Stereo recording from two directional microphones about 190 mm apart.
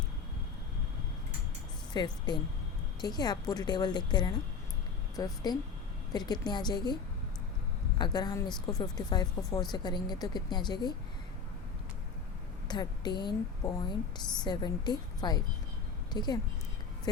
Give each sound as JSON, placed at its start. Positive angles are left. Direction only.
{"t": 2.0, "sound": "speech", "side_deg": 20}
{"t": 12.6, "sound": "a woman's voice", "side_deg": 20}